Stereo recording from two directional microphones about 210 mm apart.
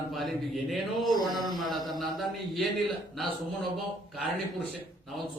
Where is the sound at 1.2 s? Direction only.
20° right (ahead or behind).